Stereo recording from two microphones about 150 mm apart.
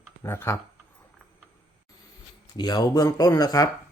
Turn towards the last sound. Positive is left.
turn(degrees=25)  # may be behind; listen again after turning